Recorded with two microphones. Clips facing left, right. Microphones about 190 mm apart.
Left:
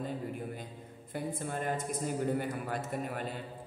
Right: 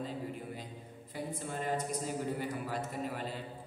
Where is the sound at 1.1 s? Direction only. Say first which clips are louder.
Left 3 dB; 50° left (ahead or behind).